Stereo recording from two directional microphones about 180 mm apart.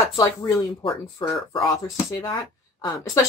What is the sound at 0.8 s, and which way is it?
Speech, 30° left (ahead or behind).